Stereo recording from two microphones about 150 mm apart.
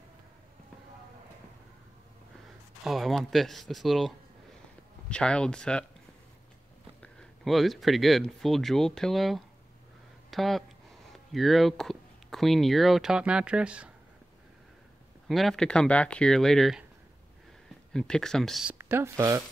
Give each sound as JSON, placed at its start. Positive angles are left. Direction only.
{"t": 2.8, "sound": "speech", "side_deg": 0}
{"t": 5.1, "sound": "speech", "side_deg": 5}
{"t": 7.0, "sound": "speech", "side_deg": 5}
{"t": 15.2, "sound": "speech", "side_deg": 0}
{"t": 17.9, "sound": "speech", "side_deg": 5}
{"t": 18.8, "sound": "speech", "side_deg": -15}